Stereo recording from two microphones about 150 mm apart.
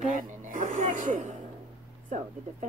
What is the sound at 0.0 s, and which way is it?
Music, 60° right (ahead or behind).